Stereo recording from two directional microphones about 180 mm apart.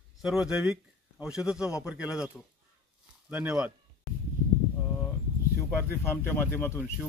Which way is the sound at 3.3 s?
5° right (ahead or behind).